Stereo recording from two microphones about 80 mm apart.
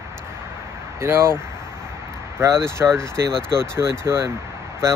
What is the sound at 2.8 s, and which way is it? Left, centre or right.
Speech, centre.